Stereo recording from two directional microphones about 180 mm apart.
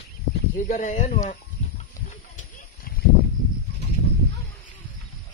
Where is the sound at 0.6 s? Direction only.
45° left (ahead or behind).